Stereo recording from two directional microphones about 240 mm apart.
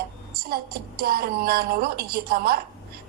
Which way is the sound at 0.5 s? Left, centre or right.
Right.